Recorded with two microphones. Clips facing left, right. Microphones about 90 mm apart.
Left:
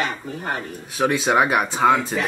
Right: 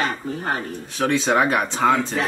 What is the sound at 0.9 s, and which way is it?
Speech, 10° left (ahead or behind).